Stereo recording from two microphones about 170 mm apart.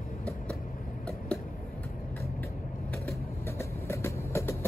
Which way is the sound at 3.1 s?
15° left (ahead or behind).